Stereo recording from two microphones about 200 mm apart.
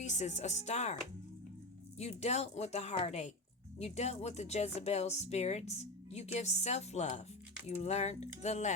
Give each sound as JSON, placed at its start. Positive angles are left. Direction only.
{"t": 0.0, "sound": "speech", "side_deg": 35}
{"t": 2.0, "sound": "speech", "side_deg": 35}